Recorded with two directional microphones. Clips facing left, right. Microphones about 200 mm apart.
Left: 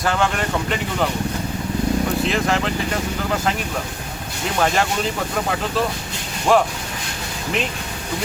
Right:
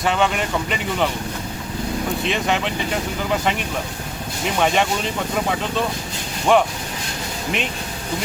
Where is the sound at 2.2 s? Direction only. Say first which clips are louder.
Left 1 dB; centre (ahead or behind).